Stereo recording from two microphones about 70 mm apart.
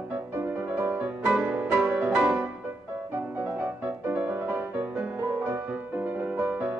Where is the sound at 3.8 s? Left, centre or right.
Right.